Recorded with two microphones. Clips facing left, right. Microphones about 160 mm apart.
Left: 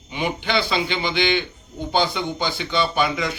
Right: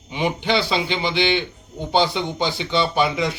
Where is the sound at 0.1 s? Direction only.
25° right (ahead or behind).